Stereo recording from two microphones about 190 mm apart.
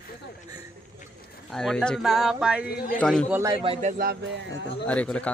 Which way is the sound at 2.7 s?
50° left (ahead or behind).